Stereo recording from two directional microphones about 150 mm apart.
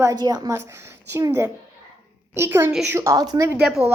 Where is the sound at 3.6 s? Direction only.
5° right (ahead or behind).